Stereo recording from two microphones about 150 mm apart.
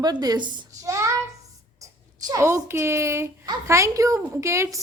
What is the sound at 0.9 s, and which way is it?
Child singing, 20° right (ahead or behind).